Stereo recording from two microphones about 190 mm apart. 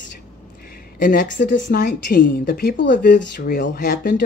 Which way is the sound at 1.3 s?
60° left (ahead or behind).